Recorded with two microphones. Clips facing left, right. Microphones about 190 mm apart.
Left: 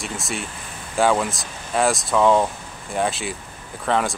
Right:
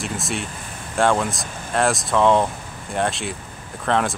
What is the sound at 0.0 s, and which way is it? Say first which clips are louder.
Speech: right 2 dB; centre (ahead or behind).